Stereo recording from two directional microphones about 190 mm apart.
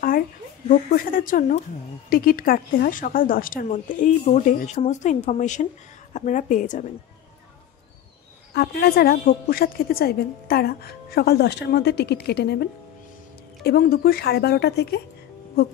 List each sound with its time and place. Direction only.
0.7 s speech: 45° left (ahead or behind)
8.5 s a woman's voice: 60° left (ahead or behind)
13.7 s a woman's voice: 55° left (ahead or behind)